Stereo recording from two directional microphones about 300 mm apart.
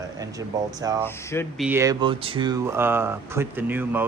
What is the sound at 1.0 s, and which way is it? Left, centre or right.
Speech, centre.